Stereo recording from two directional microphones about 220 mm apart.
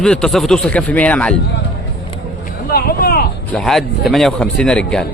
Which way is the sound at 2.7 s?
45° left (ahead or behind).